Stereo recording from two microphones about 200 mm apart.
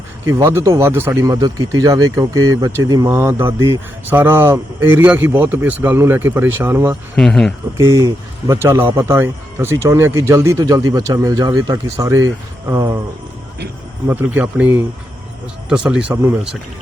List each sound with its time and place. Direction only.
0.3 s speech: 15° right (ahead or behind)
7.2 s speech: centre (ahead or behind)
7.8 s speech: 15° right (ahead or behind)
14.1 s speech: 10° right (ahead or behind)